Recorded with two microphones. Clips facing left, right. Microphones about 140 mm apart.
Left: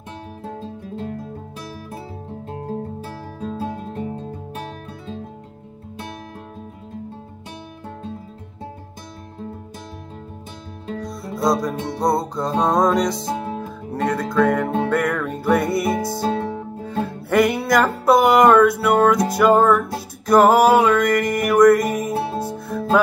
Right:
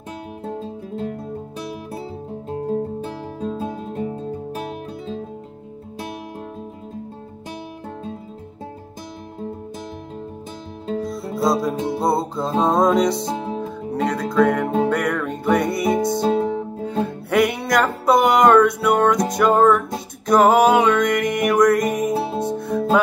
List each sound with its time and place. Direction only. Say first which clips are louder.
3.3 s music: even; 25° right (ahead or behind)
11.1 s music: left 1 dB; centre (ahead or behind)
13.3 s music: even; 25° right (ahead or behind)
13.6 s music: right 2 dB; centre (ahead or behind)
16.2 s music: right 4 dB; 20° right (ahead or behind)
17.0 s music: left 1 dB; centre (ahead or behind)